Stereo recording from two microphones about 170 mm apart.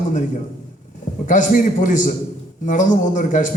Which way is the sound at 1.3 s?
50° left (ahead or behind).